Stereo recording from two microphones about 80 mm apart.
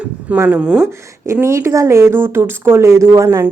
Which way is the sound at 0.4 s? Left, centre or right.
Centre.